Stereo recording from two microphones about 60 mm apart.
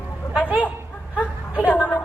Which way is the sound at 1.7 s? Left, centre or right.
Left.